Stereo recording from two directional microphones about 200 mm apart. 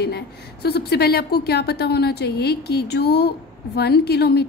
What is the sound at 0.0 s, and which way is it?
A woman's voice, 55° left (ahead or behind).